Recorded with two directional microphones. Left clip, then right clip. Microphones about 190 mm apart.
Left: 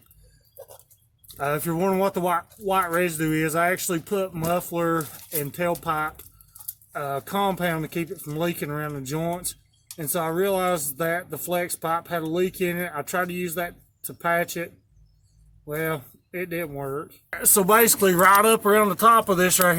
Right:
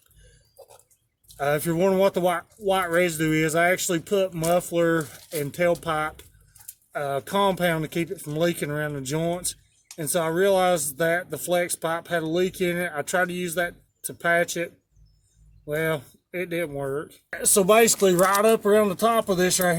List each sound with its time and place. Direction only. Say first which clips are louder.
1.4 s speech: right 2 dB; 10° left (ahead or behind)
17.3 s speech: right 1 dB; 30° left (ahead or behind)